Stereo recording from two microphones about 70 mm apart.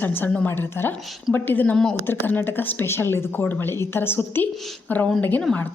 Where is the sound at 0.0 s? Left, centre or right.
Left.